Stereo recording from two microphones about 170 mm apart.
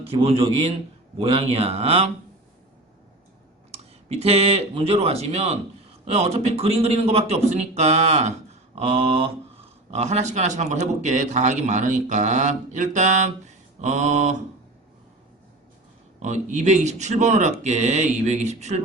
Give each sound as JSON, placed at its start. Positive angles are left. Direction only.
{"t": 0.0, "sound": "a man's voice", "side_deg": -35}
{"t": 3.7, "sound": "a man's voice", "side_deg": -35}
{"t": 16.2, "sound": "speech", "side_deg": -45}